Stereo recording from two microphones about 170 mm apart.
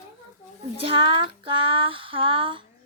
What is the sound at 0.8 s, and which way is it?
Child singing, 30° right (ahead or behind).